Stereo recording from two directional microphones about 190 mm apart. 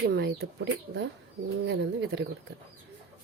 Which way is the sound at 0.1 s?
60° right (ahead or behind).